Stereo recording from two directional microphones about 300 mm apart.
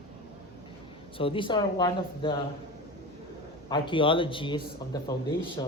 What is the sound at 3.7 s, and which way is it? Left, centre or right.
Speech, centre.